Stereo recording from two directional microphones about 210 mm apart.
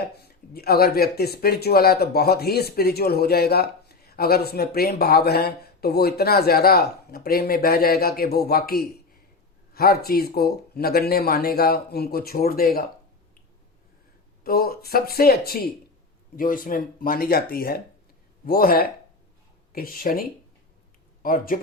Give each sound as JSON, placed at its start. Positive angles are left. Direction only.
{"t": 0.2, "sound": "speech", "side_deg": 45}
{"t": 14.4, "sound": "speech", "side_deg": 45}